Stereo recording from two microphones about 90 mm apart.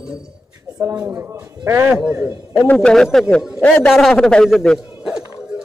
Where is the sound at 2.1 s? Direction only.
30° right (ahead or behind).